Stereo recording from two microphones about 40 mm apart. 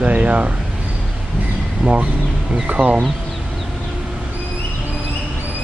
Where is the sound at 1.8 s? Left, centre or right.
Right.